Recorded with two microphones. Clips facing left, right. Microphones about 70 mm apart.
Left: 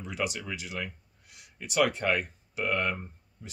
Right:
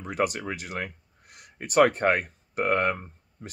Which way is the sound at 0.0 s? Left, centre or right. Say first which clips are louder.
Right 6 dB; right.